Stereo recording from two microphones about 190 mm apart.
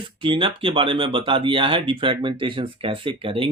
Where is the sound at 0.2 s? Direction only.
25° right (ahead or behind).